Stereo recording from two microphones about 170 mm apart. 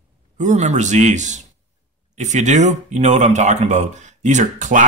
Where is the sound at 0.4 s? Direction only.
45° right (ahead or behind).